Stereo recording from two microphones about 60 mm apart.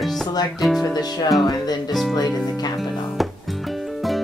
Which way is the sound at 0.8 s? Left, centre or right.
Left.